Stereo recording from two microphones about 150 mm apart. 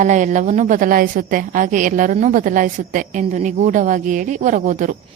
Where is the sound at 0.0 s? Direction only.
55° right (ahead or behind).